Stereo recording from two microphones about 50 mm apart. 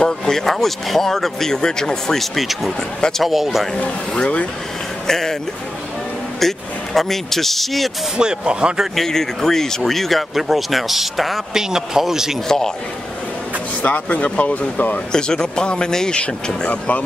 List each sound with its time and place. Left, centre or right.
0.0 s speech: centre
3.0 s speech: centre
3.3 s speech: centre
4.1 s speech: centre
6.4 s speech: centre
8.2 s speech: centre
8.9 s speech: centre
12.4 s speech: centre
13.8 s speech: left
15.1 s speech: centre